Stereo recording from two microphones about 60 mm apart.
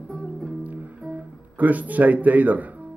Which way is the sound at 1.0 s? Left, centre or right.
Right.